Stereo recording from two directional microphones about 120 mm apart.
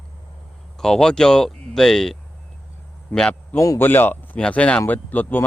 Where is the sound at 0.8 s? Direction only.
5° left (ahead or behind).